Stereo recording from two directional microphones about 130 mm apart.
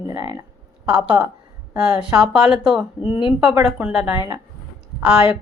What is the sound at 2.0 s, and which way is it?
A woman's voice, 5° right (ahead or behind).